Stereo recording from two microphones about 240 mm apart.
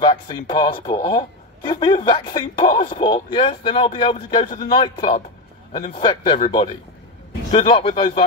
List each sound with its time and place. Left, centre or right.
0.0 s a man's voice: centre
7.5 s a man's voice: left